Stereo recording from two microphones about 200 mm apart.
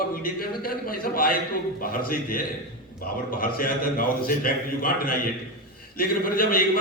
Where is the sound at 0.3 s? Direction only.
45° left (ahead or behind).